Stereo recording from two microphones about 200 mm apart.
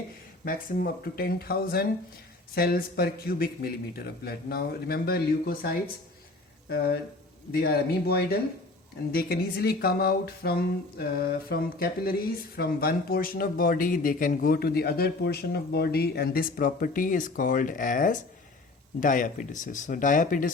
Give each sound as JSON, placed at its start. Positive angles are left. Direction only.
{"t": 0.4, "sound": "speech", "side_deg": 45}